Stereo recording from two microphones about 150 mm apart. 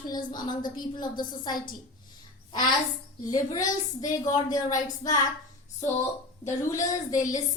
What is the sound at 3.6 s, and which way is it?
Speech, 60° left (ahead or behind).